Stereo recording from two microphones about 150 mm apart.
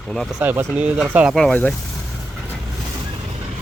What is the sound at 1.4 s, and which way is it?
Speech, 10° left (ahead or behind).